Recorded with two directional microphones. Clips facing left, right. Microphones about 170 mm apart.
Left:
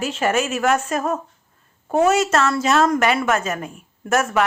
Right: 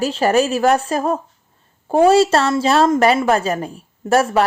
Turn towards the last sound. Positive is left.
turn(degrees=-30)  # may be behind; listen again after turning